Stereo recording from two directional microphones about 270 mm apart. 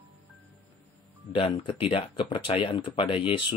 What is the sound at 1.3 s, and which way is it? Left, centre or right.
Speech, centre.